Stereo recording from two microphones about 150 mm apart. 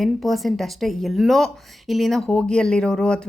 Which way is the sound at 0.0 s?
Centre (ahead or behind).